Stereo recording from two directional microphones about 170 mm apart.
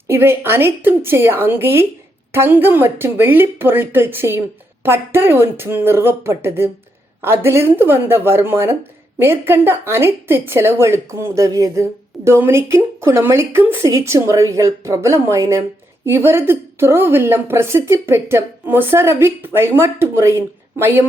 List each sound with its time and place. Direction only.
0.1 s a woman's voice: 15° right (ahead or behind)